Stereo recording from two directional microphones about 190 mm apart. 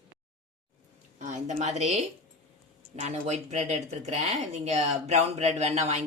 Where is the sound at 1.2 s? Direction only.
40° right (ahead or behind).